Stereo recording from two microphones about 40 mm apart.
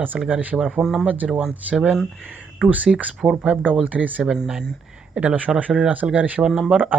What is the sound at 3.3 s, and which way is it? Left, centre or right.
Speech, right.